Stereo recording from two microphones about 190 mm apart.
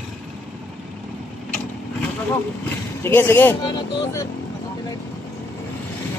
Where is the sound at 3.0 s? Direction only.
10° left (ahead or behind).